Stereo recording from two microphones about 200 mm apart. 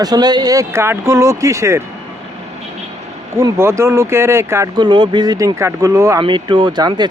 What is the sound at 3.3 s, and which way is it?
Speech, 15° right (ahead or behind).